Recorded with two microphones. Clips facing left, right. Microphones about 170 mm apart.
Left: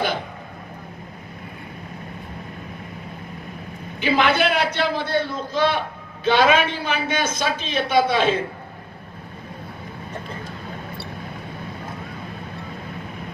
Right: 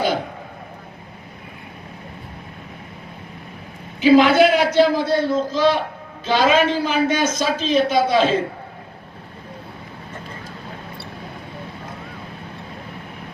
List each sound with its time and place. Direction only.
4.0 s a man's voice: 60° left (ahead or behind)